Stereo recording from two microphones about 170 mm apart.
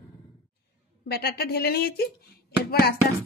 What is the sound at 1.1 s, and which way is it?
A woman's voice, 65° left (ahead or behind).